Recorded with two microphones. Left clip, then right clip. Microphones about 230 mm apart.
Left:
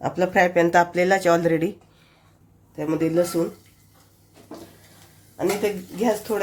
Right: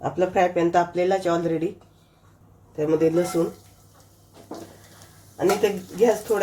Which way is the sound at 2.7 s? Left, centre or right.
Left.